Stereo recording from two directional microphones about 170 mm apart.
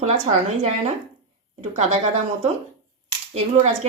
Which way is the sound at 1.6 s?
40° right (ahead or behind).